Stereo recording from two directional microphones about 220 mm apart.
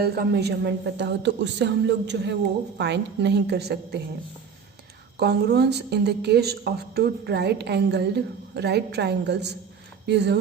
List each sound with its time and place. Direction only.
0.0 s a woman's voice: 45° right (ahead or behind)
5.2 s a woman's voice: 50° right (ahead or behind)